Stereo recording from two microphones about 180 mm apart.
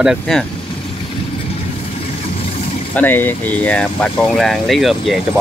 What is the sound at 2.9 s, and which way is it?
Speech, 10° left (ahead or behind).